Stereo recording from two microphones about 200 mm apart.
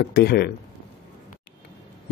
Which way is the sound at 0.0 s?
55° left (ahead or behind).